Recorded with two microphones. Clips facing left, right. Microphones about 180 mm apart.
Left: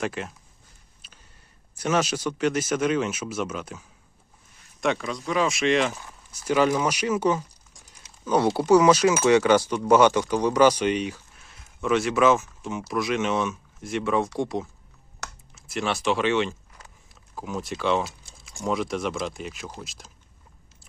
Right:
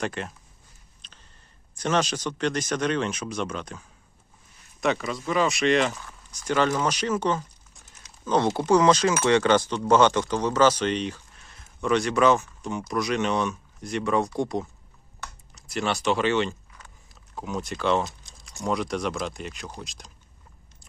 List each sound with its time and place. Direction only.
0.0 s speech: centre (ahead or behind)
1.0 s a sound: 5° left (ahead or behind)
1.8 s speech: 10° left (ahead or behind)
5.9 s speech: 15° left (ahead or behind); by 14.7 s centre (ahead or behind)
15.2 s computer keyboard: 85° left
15.5 s speech: centre (ahead or behind)